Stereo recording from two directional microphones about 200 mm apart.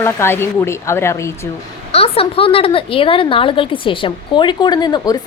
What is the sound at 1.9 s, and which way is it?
A woman's voice, 30° left (ahead or behind).